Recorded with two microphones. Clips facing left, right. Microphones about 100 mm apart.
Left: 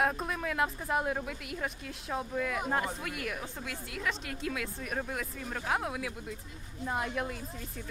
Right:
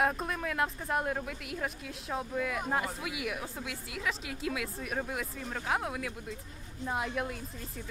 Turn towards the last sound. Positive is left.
turn(degrees=0)  # may be behind; listen again after turning